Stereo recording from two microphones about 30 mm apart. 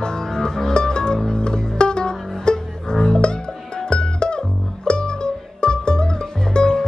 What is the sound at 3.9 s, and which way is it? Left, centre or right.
Music, left.